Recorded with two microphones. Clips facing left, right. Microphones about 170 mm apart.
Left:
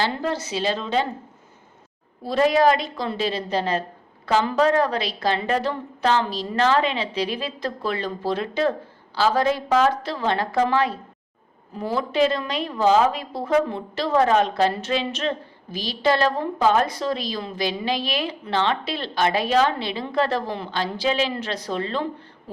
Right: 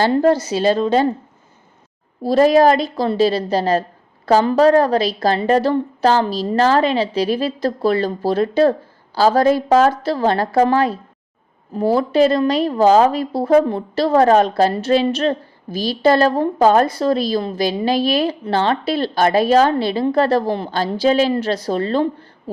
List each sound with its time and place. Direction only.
0.0 s a woman's voice: 45° right (ahead or behind)
2.2 s a woman's voice: 40° right (ahead or behind)